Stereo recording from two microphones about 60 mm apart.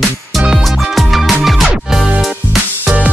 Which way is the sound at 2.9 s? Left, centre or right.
Right.